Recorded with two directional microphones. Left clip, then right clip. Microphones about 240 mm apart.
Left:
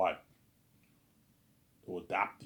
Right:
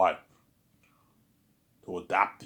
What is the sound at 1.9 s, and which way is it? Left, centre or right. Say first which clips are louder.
Speech: right 7 dB; centre.